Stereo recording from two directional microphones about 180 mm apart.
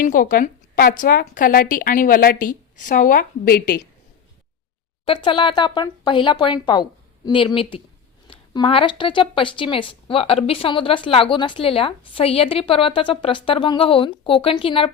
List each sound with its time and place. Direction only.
0.0 s a woman's voice: 50° left (ahead or behind)
5.0 s a woman's voice: 30° left (ahead or behind)